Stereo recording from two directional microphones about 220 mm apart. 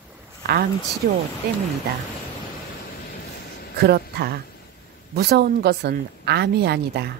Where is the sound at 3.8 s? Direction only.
45° right (ahead or behind).